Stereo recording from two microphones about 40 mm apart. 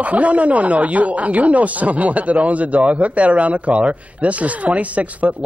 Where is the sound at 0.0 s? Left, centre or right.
Right.